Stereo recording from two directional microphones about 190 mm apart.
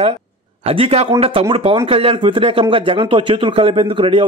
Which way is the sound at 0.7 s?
30° right (ahead or behind).